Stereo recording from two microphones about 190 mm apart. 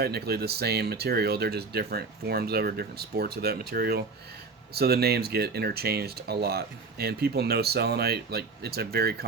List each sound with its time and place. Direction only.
0.0 s speech: 55° right (ahead or behind)